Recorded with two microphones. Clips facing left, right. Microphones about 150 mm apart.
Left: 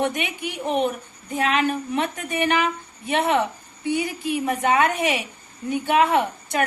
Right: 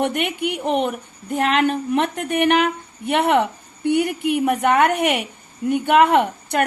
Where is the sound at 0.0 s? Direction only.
60° right (ahead or behind).